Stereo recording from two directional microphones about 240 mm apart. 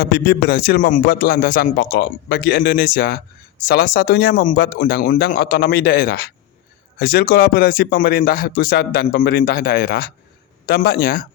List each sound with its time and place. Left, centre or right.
0.0 s speech: left